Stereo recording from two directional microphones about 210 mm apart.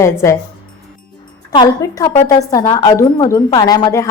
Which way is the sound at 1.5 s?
20° left (ahead or behind).